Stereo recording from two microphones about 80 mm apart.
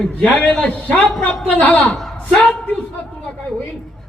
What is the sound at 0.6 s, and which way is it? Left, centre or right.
A man's voice, centre.